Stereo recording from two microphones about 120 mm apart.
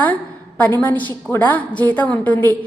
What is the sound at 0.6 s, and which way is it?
A woman's voice, 15° left (ahead or behind).